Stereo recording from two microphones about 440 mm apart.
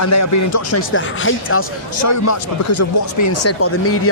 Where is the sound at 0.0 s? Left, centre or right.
Left.